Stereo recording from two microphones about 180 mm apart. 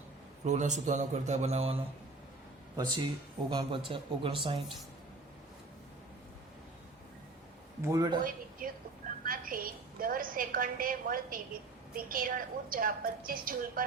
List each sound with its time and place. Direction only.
0.4 s a man's voice: 40° right (ahead or behind)
7.9 s a man's voice: 20° right (ahead or behind)
8.2 s a woman's voice: 50° right (ahead or behind)